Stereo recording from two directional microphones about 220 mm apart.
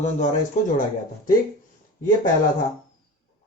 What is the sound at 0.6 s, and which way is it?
Speech, 35° left (ahead or behind).